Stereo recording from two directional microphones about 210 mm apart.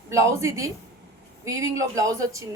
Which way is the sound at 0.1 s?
15° right (ahead or behind).